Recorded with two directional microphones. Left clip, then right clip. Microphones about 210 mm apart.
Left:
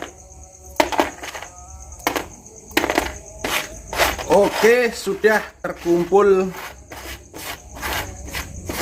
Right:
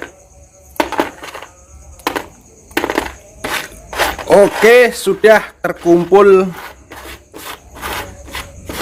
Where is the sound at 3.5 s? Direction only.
10° right (ahead or behind).